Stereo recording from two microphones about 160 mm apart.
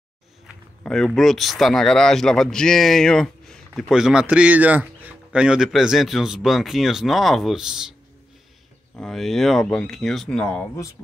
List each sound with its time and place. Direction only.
0.8 s speech: 5° left (ahead or behind)
8.9 s speech: centre (ahead or behind)